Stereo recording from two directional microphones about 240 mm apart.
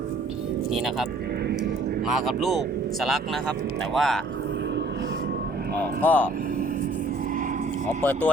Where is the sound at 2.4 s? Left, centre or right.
Centre.